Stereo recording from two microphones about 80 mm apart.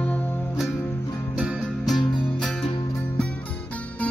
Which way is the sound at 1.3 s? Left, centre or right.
Centre.